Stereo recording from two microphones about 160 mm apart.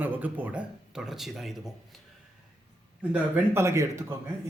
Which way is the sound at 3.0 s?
10° right (ahead or behind).